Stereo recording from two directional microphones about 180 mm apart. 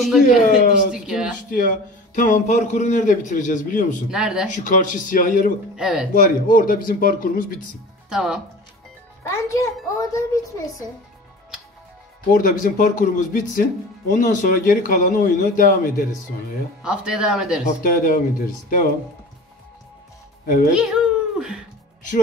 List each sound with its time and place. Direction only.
0.0 s speech: centre (ahead or behind)
2.1 s speech: 45° left (ahead or behind)
4.1 s speech: 5° right (ahead or behind)
4.5 s speech: 45° left (ahead or behind)
5.8 s speech: 5° right (ahead or behind)
6.1 s speech: 50° left (ahead or behind)
8.1 s speech: 5° right (ahead or behind)
9.2 s a child's voice: 15° left (ahead or behind)
12.3 s speech: 50° left (ahead or behind)
16.8 s speech: 5° right (ahead or behind)
17.8 s speech: 50° left (ahead or behind)
20.4 s speech: 50° left (ahead or behind)
20.7 s speech: 5° right (ahead or behind)